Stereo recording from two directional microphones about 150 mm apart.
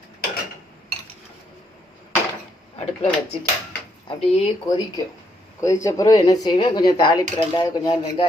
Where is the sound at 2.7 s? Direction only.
45° left (ahead or behind).